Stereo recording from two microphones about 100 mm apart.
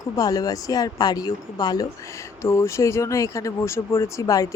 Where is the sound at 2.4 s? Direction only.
25° left (ahead or behind).